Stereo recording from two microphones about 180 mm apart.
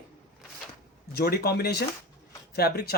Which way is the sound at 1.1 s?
60° left (ahead or behind).